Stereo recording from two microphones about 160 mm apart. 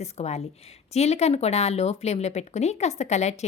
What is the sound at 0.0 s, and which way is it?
A woman's voice, 40° left (ahead or behind).